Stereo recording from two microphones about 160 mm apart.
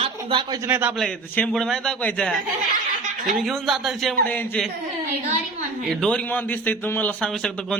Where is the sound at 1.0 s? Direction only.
5° left (ahead or behind).